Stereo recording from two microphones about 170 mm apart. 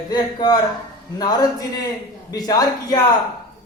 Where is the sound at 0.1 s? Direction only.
25° left (ahead or behind).